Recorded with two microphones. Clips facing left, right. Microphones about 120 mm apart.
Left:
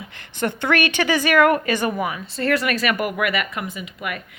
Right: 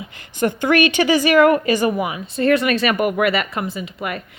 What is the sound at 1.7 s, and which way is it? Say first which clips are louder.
Speech: right 4 dB; 10° right (ahead or behind).